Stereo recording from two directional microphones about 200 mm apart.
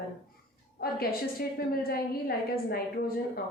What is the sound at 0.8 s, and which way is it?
A woman's voice, 50° left (ahead or behind).